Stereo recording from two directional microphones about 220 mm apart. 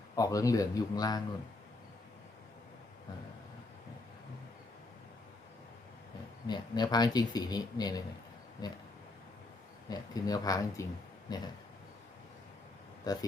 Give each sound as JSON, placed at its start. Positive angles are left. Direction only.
{"t": 0.2, "sound": "speech", "side_deg": 15}
{"t": 6.5, "sound": "speech", "side_deg": 20}
{"t": 9.9, "sound": "speech", "side_deg": 15}
{"t": 13.1, "sound": "speech", "side_deg": 15}